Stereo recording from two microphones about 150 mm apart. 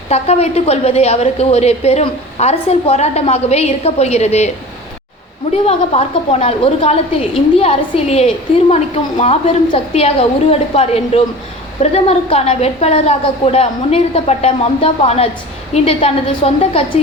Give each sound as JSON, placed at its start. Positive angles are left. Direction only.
{"t": 0.1, "sound": "a woman's voice", "side_deg": 45}
{"t": 5.6, "sound": "a woman's voice", "side_deg": 45}